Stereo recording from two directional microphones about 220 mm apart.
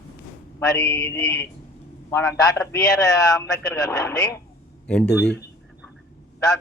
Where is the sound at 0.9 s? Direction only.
10° left (ahead or behind).